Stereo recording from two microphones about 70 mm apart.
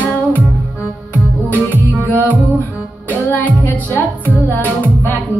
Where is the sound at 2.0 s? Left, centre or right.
Left.